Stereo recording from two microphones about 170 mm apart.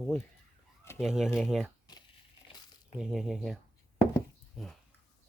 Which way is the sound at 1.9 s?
25° left (ahead or behind).